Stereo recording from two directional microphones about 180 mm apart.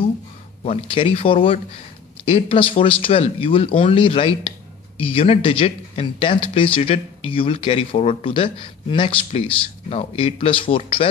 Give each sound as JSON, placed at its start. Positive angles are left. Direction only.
{"t": 0.7, "sound": "a man's voice", "side_deg": 30}